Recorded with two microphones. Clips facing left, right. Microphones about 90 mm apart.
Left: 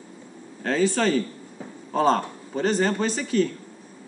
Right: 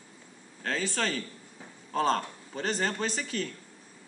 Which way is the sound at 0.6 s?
5° left (ahead or behind).